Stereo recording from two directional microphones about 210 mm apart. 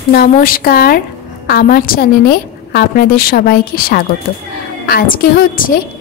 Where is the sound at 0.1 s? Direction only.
45° left (ahead or behind).